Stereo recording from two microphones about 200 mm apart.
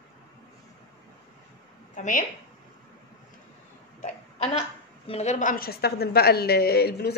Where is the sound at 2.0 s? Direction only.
40° left (ahead or behind).